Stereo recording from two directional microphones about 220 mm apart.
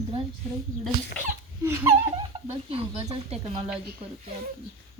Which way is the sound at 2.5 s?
25° right (ahead or behind).